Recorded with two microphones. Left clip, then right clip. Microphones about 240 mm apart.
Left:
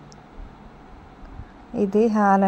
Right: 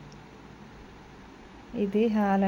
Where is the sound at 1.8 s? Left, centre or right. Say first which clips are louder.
Left 7 dB; left.